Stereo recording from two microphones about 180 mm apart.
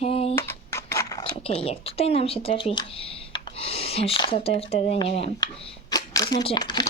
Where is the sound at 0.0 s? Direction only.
35° left (ahead or behind).